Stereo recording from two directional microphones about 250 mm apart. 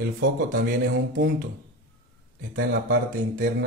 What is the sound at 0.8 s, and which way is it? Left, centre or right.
Speech, right.